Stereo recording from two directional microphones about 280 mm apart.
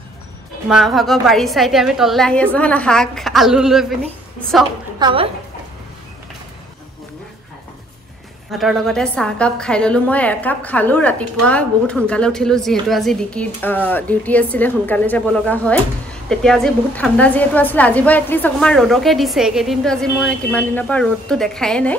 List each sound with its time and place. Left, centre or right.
0.7 s a woman's voice: centre
4.9 s a woman's voice: centre
8.5 s a woman's voice: centre